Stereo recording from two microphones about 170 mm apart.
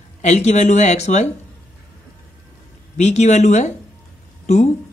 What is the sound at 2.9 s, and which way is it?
Speech, 40° left (ahead or behind).